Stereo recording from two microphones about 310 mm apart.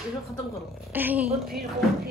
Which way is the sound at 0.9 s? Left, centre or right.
Centre.